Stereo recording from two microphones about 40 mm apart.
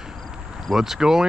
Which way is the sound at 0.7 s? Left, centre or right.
Centre.